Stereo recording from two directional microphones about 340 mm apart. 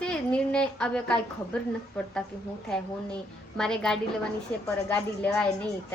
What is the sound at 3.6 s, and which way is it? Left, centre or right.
A woman's voice, centre.